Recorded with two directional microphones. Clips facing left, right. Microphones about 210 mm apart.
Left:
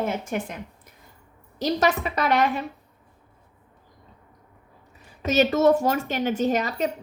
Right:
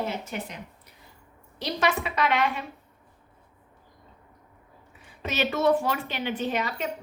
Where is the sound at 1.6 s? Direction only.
40° left (ahead or behind).